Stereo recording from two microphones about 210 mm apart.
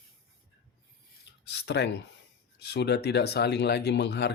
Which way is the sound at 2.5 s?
55° left (ahead or behind).